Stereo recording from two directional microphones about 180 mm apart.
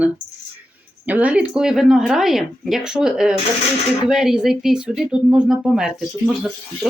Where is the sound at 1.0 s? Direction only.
10° right (ahead or behind).